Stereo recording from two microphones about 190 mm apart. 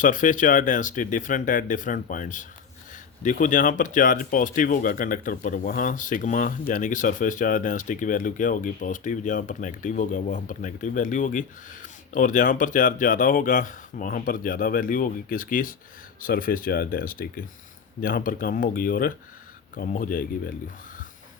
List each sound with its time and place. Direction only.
0.0 s speech: 45° left (ahead or behind)